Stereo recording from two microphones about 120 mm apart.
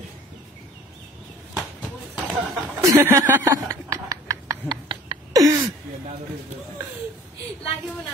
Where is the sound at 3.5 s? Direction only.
25° right (ahead or behind).